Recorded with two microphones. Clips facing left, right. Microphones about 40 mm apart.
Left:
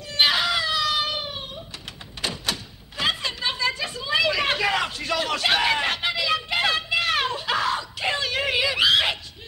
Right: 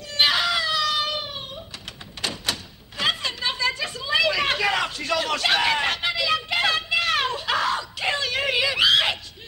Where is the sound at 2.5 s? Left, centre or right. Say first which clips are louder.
Left 1 dB; centre.